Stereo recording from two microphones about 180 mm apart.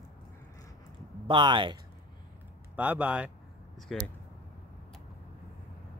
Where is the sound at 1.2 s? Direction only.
25° right (ahead or behind).